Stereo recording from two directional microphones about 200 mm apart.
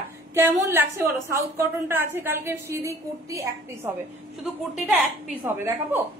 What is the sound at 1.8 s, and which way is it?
A woman's voice, 10° right (ahead or behind).